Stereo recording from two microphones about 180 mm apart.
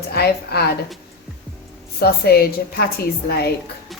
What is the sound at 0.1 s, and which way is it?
Speech, 65° left (ahead or behind).